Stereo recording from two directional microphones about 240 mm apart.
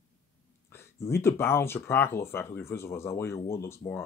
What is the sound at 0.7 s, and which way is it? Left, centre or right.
Speech, centre.